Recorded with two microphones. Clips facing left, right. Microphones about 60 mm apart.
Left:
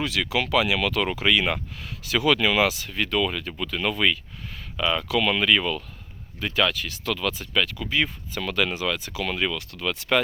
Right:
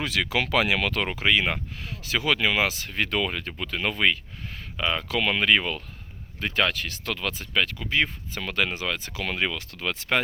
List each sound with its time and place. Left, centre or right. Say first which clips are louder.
0.1 s speech: left 1 dB; right
1.0 s speech: left 1 dB; right
2.8 s speech: left 2 dB; right
3.2 s speech: left 2 dB; right
7.2 s speech: even; right